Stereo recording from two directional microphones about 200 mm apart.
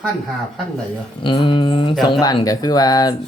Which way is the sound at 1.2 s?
25° left (ahead or behind).